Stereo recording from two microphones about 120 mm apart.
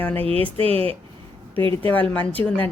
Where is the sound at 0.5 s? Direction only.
55° right (ahead or behind).